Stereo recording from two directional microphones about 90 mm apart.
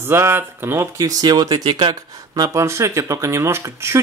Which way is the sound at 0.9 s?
40° right (ahead or behind).